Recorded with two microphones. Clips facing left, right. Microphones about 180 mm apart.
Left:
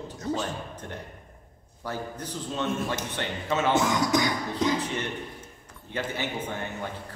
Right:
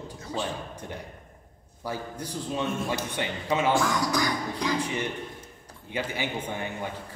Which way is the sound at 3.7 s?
20° left (ahead or behind).